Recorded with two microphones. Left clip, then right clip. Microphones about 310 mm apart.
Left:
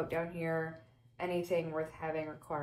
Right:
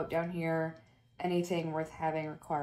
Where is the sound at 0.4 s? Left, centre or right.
Centre.